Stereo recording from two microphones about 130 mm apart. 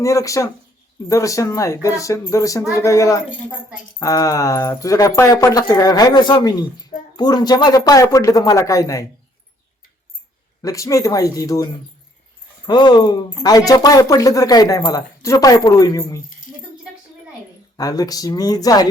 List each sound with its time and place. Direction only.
0.0 s speech: 25° left (ahead or behind)
10.6 s speech: 25° left (ahead or behind)
17.7 s speech: 30° left (ahead or behind)